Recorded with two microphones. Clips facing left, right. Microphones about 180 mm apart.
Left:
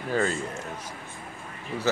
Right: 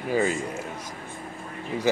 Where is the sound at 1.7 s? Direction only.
15° right (ahead or behind).